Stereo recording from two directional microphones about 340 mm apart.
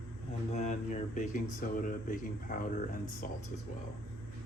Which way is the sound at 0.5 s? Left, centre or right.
Centre.